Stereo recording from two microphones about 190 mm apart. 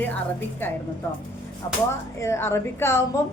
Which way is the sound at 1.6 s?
20° left (ahead or behind).